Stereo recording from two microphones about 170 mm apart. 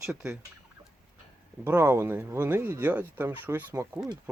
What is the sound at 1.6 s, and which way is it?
Speech, 15° right (ahead or behind).